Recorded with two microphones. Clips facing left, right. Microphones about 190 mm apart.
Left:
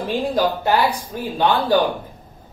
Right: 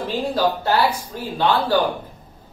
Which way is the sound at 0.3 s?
15° left (ahead or behind).